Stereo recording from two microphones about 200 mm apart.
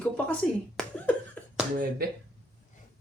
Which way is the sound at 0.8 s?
5° left (ahead or behind).